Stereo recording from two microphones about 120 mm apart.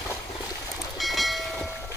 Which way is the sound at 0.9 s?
Centre (ahead or behind).